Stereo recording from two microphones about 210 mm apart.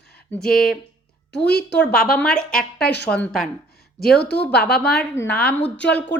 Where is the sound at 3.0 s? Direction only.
5° left (ahead or behind).